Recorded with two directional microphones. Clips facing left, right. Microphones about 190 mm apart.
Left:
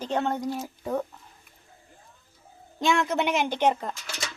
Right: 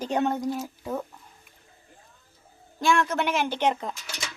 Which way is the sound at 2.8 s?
20° left (ahead or behind).